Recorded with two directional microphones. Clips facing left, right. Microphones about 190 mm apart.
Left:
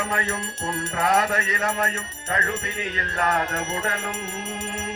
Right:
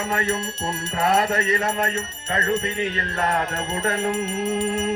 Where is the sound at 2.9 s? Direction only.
25° right (ahead or behind).